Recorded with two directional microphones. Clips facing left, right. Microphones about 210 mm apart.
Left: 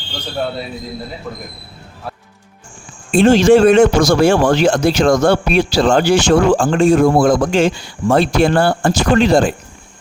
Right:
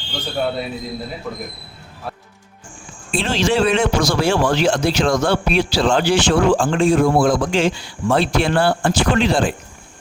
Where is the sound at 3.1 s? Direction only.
50° left (ahead or behind).